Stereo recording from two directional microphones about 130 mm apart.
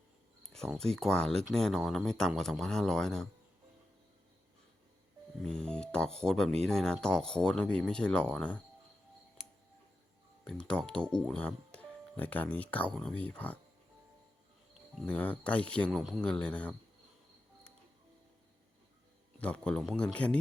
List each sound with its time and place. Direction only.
0.5 s speech: 5° left (ahead or behind)
5.4 s speech: 5° left (ahead or behind)
10.4 s speech: 5° left (ahead or behind)
14.9 s speech: 10° left (ahead or behind)
15.9 s speech: centre (ahead or behind)
19.4 s speech: 10° left (ahead or behind)